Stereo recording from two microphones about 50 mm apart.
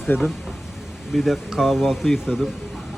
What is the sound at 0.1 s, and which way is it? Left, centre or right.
Speech, left.